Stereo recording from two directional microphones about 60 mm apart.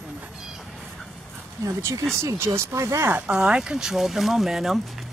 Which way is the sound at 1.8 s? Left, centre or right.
Right.